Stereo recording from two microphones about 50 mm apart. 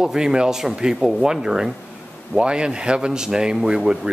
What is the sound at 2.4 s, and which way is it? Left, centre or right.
Speech, centre.